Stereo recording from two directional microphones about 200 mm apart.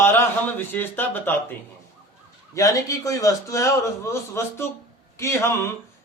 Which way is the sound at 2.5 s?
15° left (ahead or behind).